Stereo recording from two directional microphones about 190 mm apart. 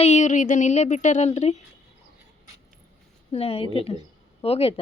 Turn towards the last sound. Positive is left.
turn(degrees=30)  # may be behind; listen again after turning